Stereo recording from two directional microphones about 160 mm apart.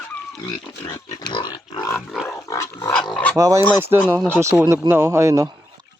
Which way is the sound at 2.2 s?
20° left (ahead or behind).